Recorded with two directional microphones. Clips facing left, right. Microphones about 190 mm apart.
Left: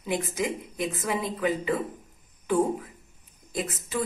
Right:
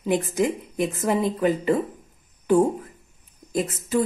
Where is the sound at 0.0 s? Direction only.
45° right (ahead or behind).